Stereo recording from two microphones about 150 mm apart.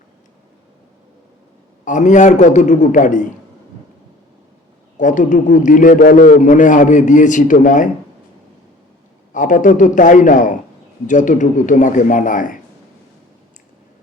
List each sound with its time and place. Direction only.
1.8 s a man's voice: 55° left (ahead or behind)
4.9 s a man's voice: 60° left (ahead or behind)
9.3 s a man's voice: 60° left (ahead or behind)